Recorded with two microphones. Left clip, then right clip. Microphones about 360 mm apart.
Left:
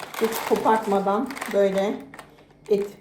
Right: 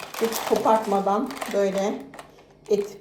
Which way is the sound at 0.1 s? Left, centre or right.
Centre.